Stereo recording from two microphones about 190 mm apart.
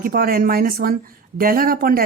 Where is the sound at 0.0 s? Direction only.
50° right (ahead or behind).